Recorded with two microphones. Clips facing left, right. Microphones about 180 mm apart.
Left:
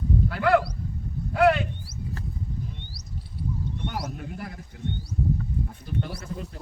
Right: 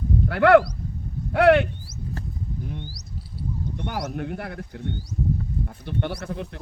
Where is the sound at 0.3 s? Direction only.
65° right (ahead or behind).